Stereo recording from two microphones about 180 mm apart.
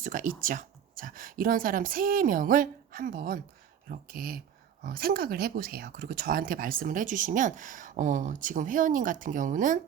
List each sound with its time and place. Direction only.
0.0 s speech: 50° right (ahead or behind)